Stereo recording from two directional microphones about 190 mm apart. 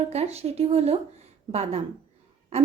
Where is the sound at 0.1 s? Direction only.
35° right (ahead or behind).